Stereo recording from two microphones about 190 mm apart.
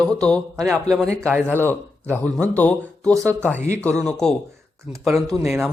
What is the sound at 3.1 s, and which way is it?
Speech, 15° right (ahead or behind).